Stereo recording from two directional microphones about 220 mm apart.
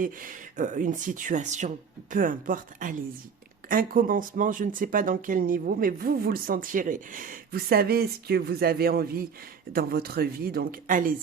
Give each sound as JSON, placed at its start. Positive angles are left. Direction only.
{"t": 0.0, "sound": "speech", "side_deg": -40}